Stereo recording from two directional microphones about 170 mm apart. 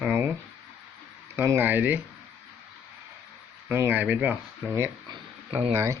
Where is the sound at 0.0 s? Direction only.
10° right (ahead or behind).